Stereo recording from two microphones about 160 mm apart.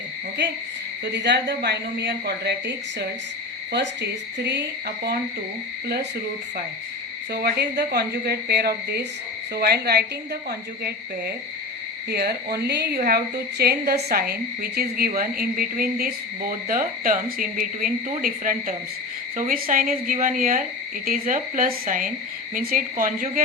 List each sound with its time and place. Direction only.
1.1 s a woman's voice: 90° right
7.3 s speech: 85° right
9.6 s speech: 80° right
12.0 s speech: 80° right; by 23.4 s 55° right (ahead or behind)